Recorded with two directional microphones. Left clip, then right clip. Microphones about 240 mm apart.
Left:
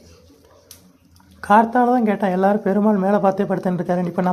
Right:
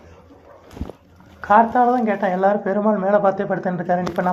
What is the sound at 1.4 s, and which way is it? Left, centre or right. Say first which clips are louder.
Speech: even; left.